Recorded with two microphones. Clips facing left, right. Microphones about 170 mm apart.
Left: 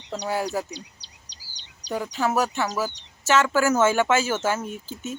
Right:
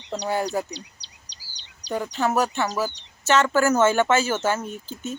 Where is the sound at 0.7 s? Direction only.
50° left (ahead or behind).